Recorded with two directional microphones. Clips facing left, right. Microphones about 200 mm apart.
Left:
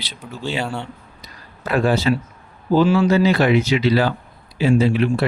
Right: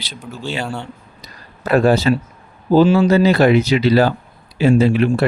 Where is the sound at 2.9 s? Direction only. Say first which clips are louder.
Right 3 dB; 40° right (ahead or behind).